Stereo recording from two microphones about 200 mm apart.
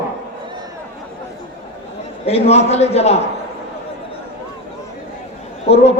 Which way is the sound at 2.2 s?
30° left (ahead or behind).